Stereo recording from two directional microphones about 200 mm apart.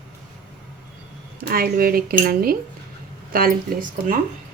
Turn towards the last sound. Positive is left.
turn(degrees=-45)  # may be behind; listen again after turning